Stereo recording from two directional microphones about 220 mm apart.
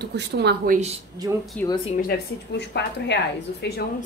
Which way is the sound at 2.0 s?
45° left (ahead or behind).